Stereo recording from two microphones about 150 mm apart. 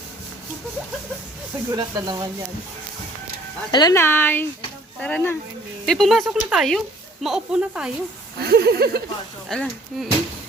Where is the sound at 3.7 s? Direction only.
25° left (ahead or behind).